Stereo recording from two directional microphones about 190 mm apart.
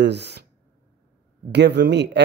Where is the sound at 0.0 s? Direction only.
65° right (ahead or behind).